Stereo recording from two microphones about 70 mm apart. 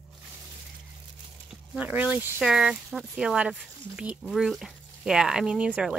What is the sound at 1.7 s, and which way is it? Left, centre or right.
Speech, centre.